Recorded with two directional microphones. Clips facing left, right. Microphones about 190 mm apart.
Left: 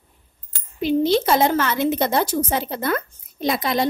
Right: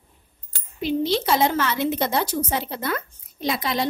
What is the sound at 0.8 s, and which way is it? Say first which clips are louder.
A woman's voice: left 4 dB; 50° left (ahead or behind).